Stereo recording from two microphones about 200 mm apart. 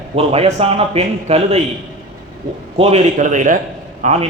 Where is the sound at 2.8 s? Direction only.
30° right (ahead or behind).